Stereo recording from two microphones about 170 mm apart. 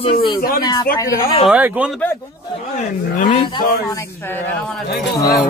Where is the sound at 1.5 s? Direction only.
5° right (ahead or behind).